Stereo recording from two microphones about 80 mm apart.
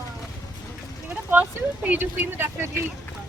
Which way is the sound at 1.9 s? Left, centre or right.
Right.